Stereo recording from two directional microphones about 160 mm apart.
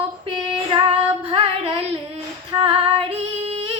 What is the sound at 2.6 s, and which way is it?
Female singing, 35° right (ahead or behind).